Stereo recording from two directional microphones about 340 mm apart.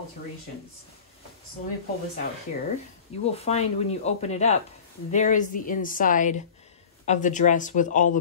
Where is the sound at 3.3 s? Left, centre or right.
Centre.